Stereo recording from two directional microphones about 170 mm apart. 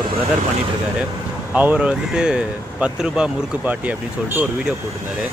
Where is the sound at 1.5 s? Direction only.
10° right (ahead or behind).